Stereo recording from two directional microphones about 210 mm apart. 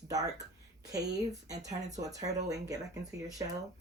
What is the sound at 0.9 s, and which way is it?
Speech, 15° right (ahead or behind).